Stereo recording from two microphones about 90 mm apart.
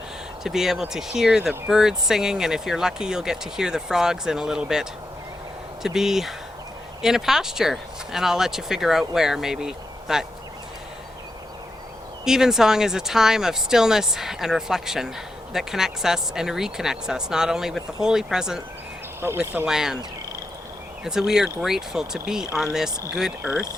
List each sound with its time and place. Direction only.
0.4 s speech: 5° right (ahead or behind)
12.2 s speech: 5° right (ahead or behind)
19.6 s speech: 5° right (ahead or behind)
21.0 s speech: 5° right (ahead or behind)
23.4 s speech: 15° right (ahead or behind)